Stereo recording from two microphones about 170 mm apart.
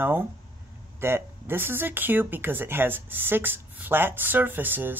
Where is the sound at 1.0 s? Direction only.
15° right (ahead or behind).